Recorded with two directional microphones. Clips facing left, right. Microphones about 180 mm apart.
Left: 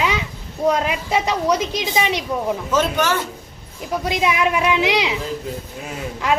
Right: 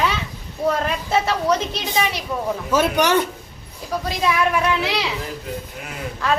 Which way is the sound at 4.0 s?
20° left (ahead or behind).